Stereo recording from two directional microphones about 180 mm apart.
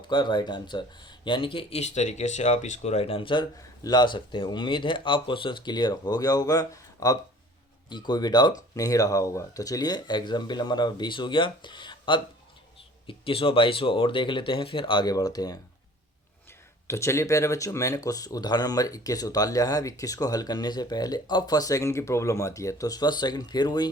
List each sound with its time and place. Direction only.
0.1 s speech: 25° left (ahead or behind)
16.8 s speech: 15° left (ahead or behind)